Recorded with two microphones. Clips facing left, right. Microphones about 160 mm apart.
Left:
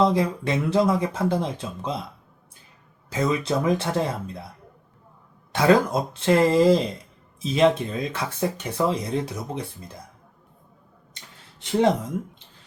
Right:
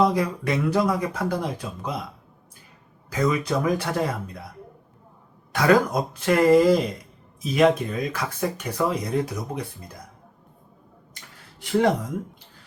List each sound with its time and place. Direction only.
0.0 s speech: 25° left (ahead or behind)
3.1 s speech: 25° left (ahead or behind)
5.5 s speech: 25° left (ahead or behind)